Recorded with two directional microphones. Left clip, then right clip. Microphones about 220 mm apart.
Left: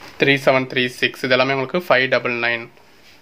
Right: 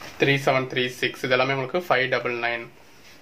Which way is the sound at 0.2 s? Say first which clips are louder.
Left 5 dB; 50° left (ahead or behind).